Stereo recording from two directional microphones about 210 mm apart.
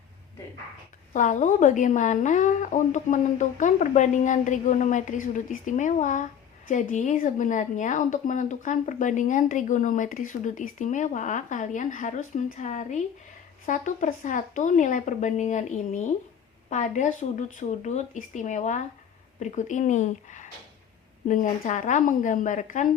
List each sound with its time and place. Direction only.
1.1 s speech: 35° left (ahead or behind)